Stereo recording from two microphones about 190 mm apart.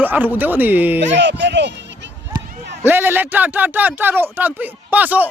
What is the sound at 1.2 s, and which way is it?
Speech, 65° right (ahead or behind).